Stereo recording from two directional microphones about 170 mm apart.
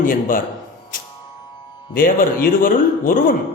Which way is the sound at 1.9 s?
55° left (ahead or behind).